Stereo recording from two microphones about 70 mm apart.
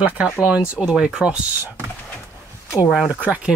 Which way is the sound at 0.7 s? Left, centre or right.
Centre.